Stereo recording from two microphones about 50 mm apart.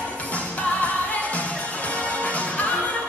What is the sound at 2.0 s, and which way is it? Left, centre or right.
Music, left.